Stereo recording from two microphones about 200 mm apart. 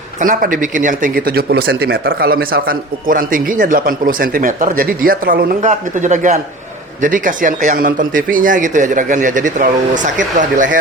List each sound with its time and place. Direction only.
0.2 s speech: 40° right (ahead or behind)